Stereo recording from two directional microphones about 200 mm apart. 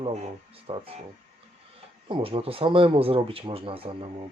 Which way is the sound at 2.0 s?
25° right (ahead or behind).